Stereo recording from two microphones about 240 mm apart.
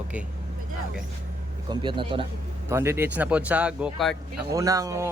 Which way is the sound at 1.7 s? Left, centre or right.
Centre.